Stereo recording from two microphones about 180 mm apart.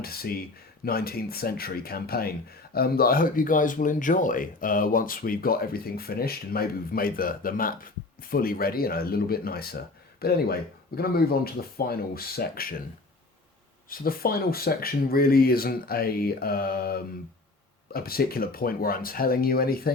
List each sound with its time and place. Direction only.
0.0 s speech: 55° left (ahead or behind)
13.9 s speech: 55° left (ahead or behind)